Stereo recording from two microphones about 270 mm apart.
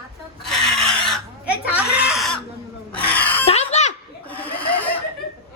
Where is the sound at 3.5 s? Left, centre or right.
Left.